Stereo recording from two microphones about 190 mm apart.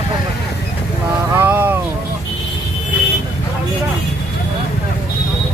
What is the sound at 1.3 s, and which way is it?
Vehicle, 10° right (ahead or behind).